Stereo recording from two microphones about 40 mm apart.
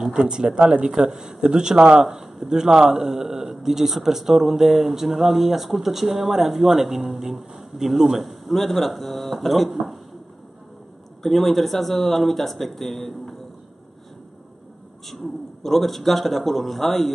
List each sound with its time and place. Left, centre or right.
0.0 s speech: centre
11.2 s speech: centre
15.0 s speech: centre